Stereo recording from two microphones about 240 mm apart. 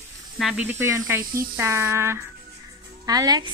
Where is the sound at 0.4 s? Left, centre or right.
Centre.